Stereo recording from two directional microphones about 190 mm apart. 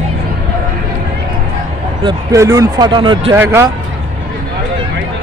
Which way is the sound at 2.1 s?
15° right (ahead or behind).